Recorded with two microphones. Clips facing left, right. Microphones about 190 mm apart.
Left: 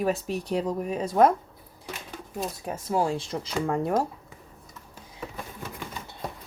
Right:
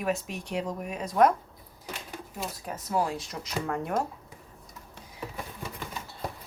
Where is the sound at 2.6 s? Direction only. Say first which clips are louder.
Left 3 dB; 30° left (ahead or behind).